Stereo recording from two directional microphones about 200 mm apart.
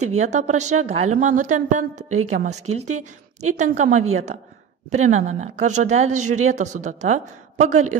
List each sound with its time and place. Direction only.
0.2 s a woman's voice: 35° right (ahead or behind)